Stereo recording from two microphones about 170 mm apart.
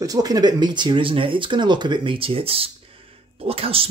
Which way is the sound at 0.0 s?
20° right (ahead or behind).